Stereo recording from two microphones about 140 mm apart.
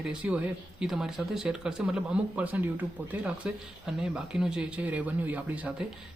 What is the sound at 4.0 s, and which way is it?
Speech, 5° right (ahead or behind).